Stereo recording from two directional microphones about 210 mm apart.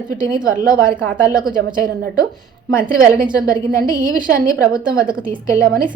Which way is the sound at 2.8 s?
40° right (ahead or behind).